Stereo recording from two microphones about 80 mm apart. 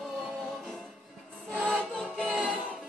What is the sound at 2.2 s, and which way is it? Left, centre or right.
Music, centre.